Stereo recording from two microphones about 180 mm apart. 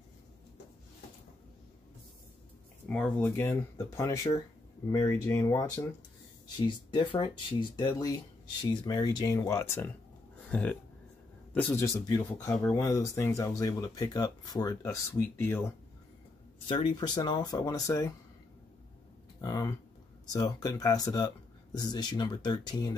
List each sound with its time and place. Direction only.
2.9 s speech: 5° left (ahead or behind)
6.5 s speech: 25° left (ahead or behind)
16.6 s speech: 25° left (ahead or behind)
19.4 s speech: 20° left (ahead or behind)